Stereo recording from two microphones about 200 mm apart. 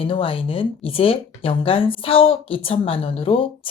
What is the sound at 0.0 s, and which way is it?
Speech, 25° left (ahead or behind).